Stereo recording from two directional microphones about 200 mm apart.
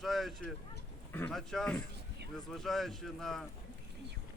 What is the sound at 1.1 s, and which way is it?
Speech, 5° left (ahead or behind).